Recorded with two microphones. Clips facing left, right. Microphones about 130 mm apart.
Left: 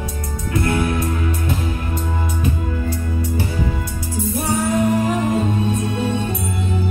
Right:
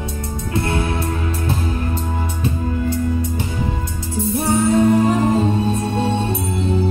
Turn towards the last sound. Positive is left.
turn(degrees=-30)  # may be behind; listen again after turning